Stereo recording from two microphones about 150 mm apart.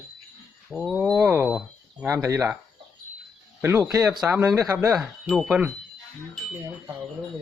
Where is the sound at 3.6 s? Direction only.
15° right (ahead or behind).